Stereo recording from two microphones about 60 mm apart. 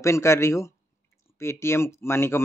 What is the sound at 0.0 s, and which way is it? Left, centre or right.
Speech, left.